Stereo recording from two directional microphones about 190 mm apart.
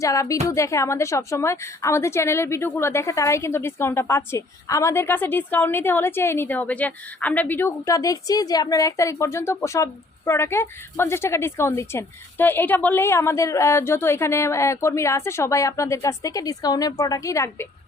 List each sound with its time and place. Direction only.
0.0 s a woman's voice: 15° left (ahead or behind)